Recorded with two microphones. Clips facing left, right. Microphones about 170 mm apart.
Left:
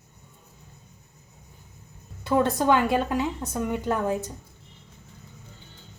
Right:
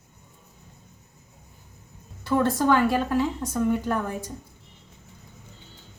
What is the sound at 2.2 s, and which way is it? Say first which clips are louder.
Speech: even; 20° left (ahead or behind).